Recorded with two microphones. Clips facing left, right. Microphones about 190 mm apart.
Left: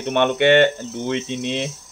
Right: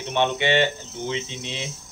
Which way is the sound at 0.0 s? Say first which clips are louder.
Left 6 dB; 55° left (ahead or behind).